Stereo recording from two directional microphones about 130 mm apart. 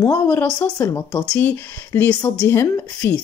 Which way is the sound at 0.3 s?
15° left (ahead or behind).